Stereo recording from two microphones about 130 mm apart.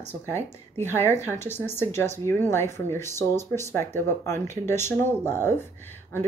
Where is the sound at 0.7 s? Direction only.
20° left (ahead or behind).